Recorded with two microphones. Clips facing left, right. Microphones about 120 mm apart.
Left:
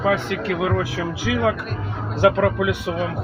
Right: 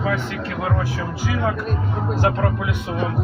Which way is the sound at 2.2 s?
85° left.